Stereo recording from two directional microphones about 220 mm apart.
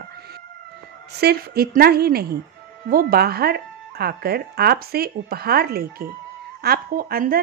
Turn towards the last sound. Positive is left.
turn(degrees=-40)  # may be behind; listen again after turning